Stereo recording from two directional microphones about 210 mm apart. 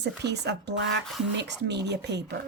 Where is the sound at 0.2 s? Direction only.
55° right (ahead or behind).